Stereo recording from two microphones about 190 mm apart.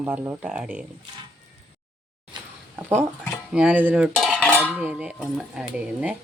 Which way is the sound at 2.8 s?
10° right (ahead or behind).